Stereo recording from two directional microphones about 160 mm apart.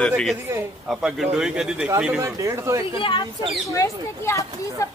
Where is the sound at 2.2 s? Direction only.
20° right (ahead or behind).